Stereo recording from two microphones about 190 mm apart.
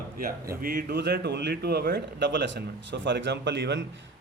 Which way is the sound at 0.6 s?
50° right (ahead or behind).